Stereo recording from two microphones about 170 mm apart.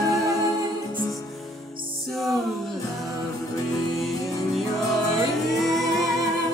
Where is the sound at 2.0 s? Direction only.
Centre (ahead or behind).